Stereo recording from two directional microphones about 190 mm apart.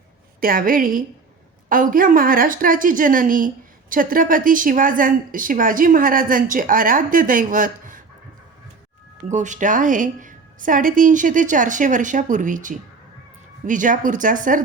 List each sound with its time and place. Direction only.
0.3 s a woman's voice: 50° right (ahead or behind)
9.3 s a woman's voice: 40° right (ahead or behind)